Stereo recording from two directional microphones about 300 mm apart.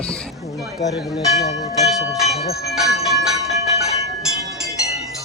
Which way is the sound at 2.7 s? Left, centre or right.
Centre.